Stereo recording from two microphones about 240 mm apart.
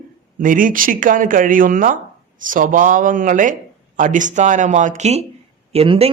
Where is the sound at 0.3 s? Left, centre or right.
Right.